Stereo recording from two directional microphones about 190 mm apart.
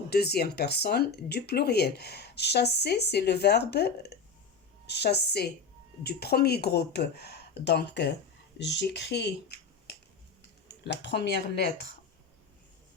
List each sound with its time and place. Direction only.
0.1 s speech: 55° left (ahead or behind)